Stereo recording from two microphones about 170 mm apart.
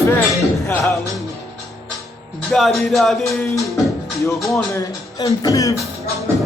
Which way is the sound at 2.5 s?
Centre (ahead or behind).